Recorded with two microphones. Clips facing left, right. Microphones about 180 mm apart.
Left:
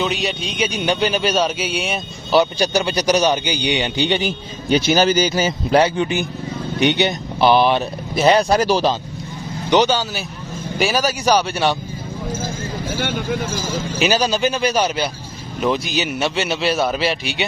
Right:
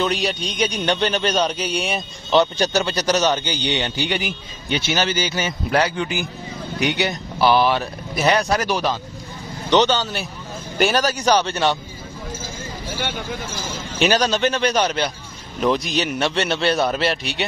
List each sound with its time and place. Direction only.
0.0 s a man's voice: centre (ahead or behind)
2.6 s a man's voice: 15° left (ahead or behind)
4.6 s speech: 40° left (ahead or behind)
9.7 s a man's voice: 10° left (ahead or behind)
12.9 s speech: 50° left (ahead or behind)
13.9 s a man's voice: 5° left (ahead or behind)